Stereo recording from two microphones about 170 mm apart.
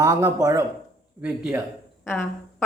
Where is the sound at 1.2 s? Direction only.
5° right (ahead or behind).